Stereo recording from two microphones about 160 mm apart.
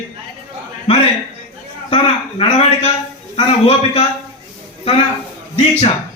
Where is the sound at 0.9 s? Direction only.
40° left (ahead or behind).